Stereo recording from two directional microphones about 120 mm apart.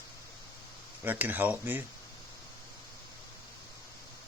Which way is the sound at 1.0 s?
15° right (ahead or behind).